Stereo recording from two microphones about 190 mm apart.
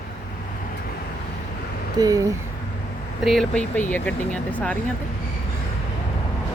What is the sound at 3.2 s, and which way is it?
Speech, centre (ahead or behind).